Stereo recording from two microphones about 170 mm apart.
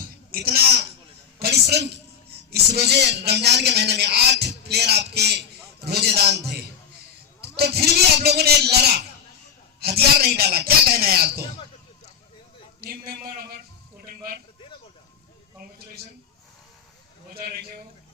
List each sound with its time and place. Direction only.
0.3 s speech: 60° right (ahead or behind)
7.5 s speech: 70° right (ahead or behind)
12.8 s a man's voice: 60° right (ahead or behind)
17.4 s speech: 65° right (ahead or behind)